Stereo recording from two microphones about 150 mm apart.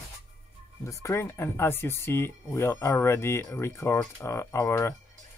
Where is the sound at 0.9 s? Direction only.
20° left (ahead or behind).